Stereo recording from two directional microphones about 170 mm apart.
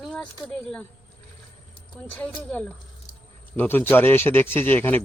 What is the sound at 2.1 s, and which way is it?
Speech, 10° left (ahead or behind).